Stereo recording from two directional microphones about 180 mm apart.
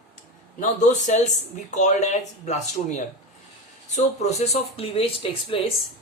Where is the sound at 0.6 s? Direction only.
40° left (ahead or behind).